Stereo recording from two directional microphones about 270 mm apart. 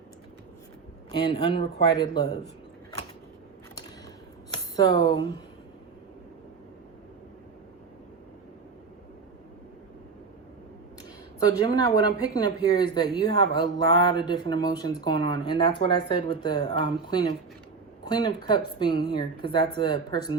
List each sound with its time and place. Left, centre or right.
1.1 s speech: centre
4.5 s speech: centre
11.3 s speech: centre
18.4 s speech: centre